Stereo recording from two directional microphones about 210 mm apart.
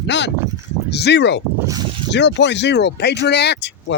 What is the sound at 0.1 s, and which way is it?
Speech, 55° left (ahead or behind).